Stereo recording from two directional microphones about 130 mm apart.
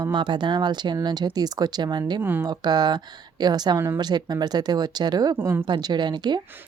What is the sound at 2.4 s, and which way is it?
Speech, 35° right (ahead or behind).